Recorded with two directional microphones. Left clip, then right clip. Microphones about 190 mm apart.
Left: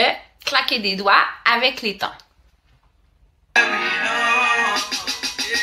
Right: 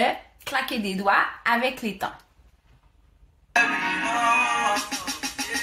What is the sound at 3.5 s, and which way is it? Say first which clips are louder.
Music: left 4 dB; 15° left (ahead or behind).